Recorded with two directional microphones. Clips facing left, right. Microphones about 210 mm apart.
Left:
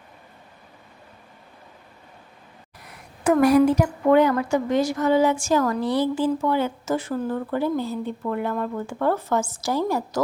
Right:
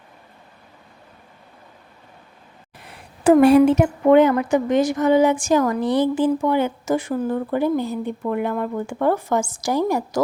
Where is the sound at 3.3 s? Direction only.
30° right (ahead or behind).